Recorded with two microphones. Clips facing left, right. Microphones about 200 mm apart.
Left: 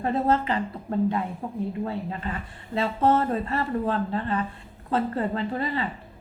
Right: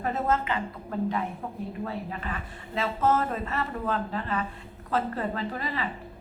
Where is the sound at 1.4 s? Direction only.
20° left (ahead or behind).